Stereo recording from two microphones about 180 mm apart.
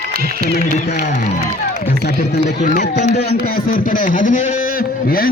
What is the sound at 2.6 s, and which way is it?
Speech, 40° left (ahead or behind).